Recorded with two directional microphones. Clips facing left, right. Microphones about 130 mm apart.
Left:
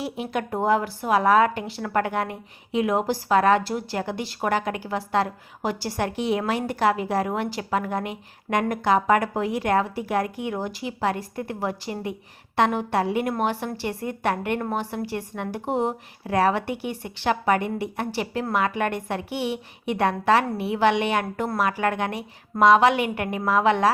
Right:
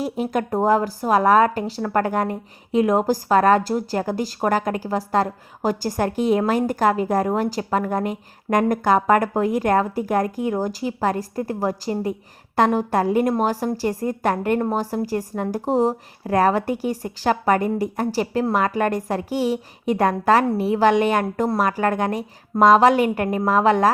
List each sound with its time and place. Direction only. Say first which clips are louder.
0.0 s speech: right 5 dB; 40° right (ahead or behind)